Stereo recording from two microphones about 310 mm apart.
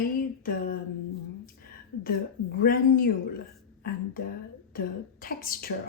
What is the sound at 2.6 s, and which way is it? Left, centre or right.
Speech, left.